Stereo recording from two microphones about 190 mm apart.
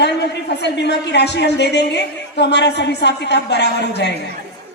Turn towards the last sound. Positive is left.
turn(degrees=60)  # may be behind; listen again after turning